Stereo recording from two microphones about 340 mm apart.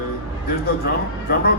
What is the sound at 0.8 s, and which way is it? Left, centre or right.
Speech, left.